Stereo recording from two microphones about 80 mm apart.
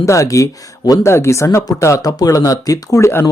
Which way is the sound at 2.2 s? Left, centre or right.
Left.